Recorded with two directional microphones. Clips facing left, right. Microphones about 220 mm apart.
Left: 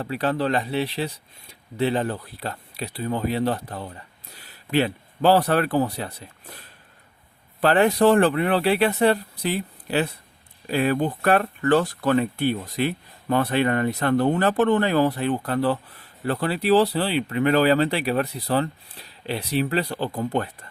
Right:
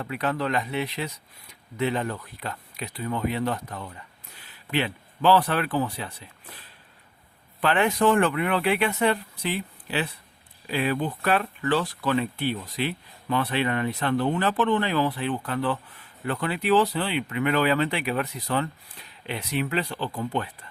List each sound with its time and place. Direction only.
0.0 s speech: 30° left (ahead or behind)